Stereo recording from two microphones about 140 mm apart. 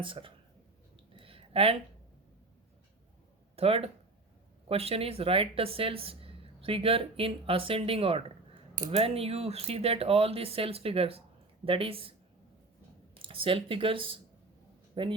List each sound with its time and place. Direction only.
0.0 s speech: 40° right (ahead or behind)
1.2 s a sound: 40° right (ahead or behind)
3.5 s speech: 45° right (ahead or behind)
13.2 s speech: 40° right (ahead or behind)